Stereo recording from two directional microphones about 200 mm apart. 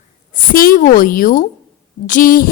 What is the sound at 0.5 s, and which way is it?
A woman's voice, 45° left (ahead or behind).